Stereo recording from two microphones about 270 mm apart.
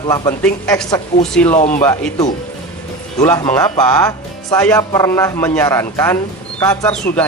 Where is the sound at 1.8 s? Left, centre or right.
Centre.